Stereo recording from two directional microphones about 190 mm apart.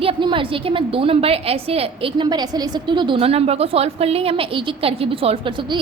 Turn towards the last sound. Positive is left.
turn(degrees=-25)  # may be behind; listen again after turning